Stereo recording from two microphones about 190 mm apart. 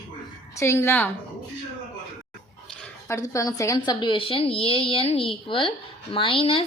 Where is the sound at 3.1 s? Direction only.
15° left (ahead or behind).